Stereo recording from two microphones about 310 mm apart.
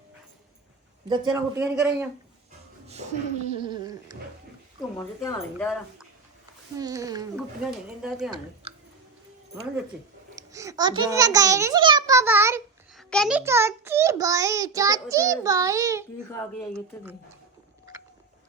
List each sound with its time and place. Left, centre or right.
1.0 s a child's voice: centre
2.8 s a sound: right
4.9 s speech: centre
6.7 s a child's voice: centre
8.6 s a sound: centre
10.3 s a child's voice: centre